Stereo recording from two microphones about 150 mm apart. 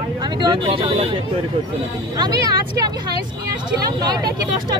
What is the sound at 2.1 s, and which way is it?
Speech, 25° right (ahead or behind).